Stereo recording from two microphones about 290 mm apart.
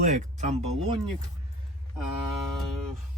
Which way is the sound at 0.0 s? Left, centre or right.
Right.